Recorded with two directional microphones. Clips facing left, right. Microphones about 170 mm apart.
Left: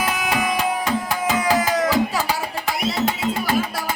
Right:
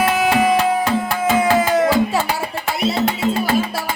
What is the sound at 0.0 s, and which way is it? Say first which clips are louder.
Music: right 7 dB; 25° right (ahead or behind).